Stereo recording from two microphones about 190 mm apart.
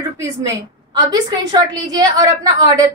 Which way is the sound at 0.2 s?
20° right (ahead or behind).